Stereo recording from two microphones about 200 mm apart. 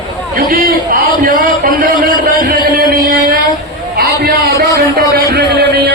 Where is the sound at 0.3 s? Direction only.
50° right (ahead or behind).